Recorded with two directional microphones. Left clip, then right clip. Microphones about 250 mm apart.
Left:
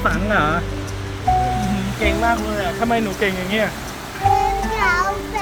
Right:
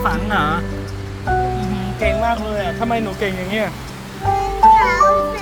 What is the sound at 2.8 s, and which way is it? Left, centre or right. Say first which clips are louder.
Speech: left 3 dB; centre.